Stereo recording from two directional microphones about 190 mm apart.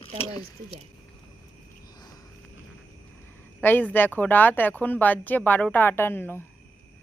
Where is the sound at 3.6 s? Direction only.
10° left (ahead or behind).